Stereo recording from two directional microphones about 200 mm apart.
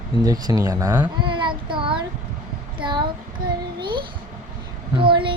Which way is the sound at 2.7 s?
25° right (ahead or behind).